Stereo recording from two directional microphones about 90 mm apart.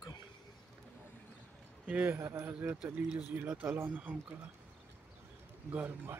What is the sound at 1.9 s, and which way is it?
Speech, 20° right (ahead or behind).